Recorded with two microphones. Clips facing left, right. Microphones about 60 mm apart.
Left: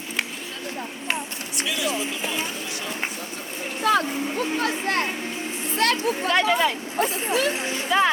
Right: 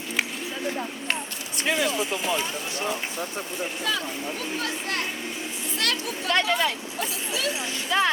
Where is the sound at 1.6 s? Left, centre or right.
Right.